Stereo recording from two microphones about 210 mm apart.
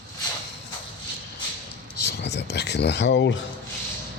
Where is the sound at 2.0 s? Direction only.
50° left (ahead or behind).